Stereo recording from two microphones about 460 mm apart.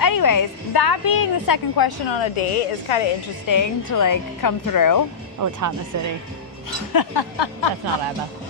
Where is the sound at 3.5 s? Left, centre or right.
Left.